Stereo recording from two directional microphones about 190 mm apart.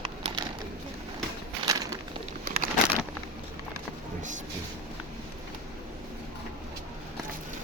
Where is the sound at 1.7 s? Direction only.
20° right (ahead or behind).